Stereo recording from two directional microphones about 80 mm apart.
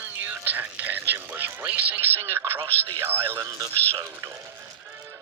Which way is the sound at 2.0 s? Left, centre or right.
Right.